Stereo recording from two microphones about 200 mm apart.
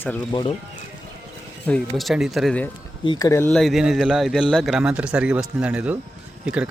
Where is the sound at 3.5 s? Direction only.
Centre (ahead or behind).